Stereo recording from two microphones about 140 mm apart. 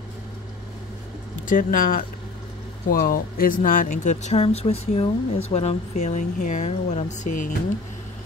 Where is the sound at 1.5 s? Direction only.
85° left.